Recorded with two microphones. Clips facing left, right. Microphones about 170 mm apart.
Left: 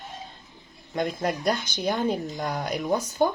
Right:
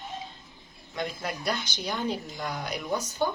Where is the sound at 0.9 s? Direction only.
45° left (ahead or behind).